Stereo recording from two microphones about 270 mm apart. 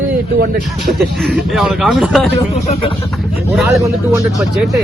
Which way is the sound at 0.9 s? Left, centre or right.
Right.